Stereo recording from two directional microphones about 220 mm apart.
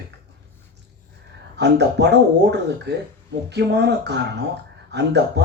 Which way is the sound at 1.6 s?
50° right (ahead or behind).